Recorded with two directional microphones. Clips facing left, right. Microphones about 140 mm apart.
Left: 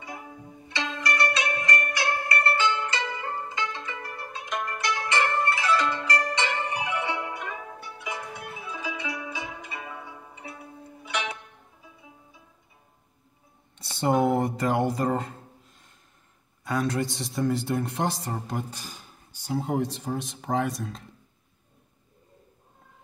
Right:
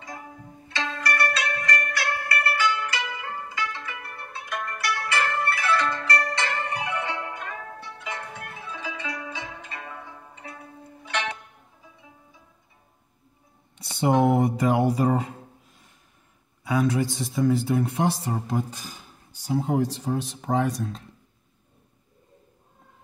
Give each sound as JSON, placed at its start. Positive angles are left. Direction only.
{"t": 0.0, "sound": "zither", "side_deg": 10}
{"t": 4.0, "sound": "zither", "side_deg": 35}
{"t": 4.5, "sound": "zither", "side_deg": 20}
{"t": 13.9, "sound": "speech", "side_deg": 0}
{"t": 16.6, "sound": "speech", "side_deg": -5}